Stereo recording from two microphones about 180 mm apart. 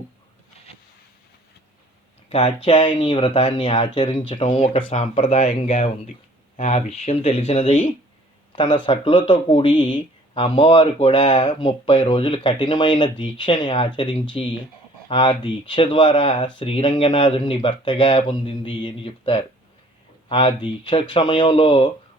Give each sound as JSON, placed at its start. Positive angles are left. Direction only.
{"t": 2.6, "sound": "speech", "side_deg": 25}